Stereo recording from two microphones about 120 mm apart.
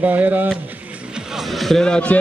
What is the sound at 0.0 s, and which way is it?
Speech, 15° right (ahead or behind).